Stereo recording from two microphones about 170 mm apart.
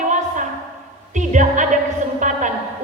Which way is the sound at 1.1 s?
45° right (ahead or behind).